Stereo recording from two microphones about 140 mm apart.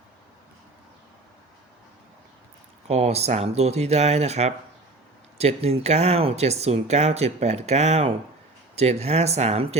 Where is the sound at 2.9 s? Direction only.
50° right (ahead or behind).